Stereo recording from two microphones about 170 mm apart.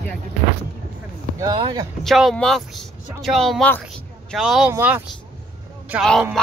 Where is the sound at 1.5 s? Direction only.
30° right (ahead or behind).